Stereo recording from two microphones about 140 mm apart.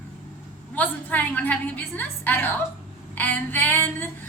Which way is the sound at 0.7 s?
10° left (ahead or behind).